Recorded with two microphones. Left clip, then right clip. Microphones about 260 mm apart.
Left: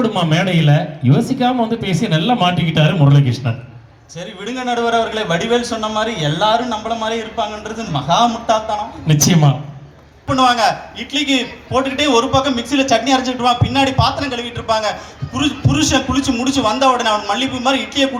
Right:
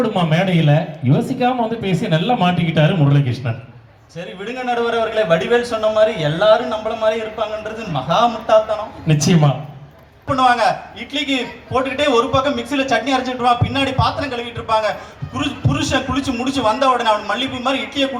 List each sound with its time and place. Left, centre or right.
0.0 s a man's voice: left